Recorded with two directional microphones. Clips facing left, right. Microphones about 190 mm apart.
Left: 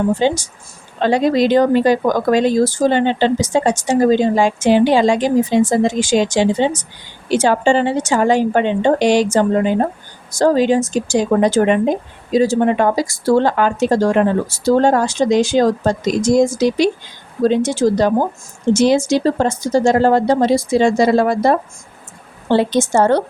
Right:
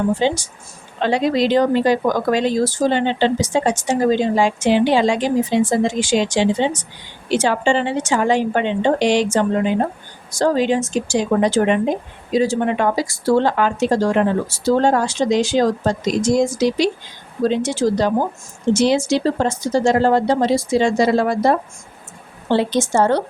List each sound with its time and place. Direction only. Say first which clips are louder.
0.2 s a woman's voice: left 2 dB; 45° left (ahead or behind)
22.5 s speech: left 3 dB; 50° left (ahead or behind)